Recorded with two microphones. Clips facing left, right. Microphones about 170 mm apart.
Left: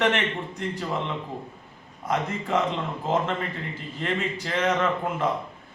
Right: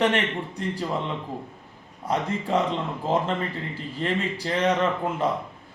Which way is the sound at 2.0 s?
30° right (ahead or behind).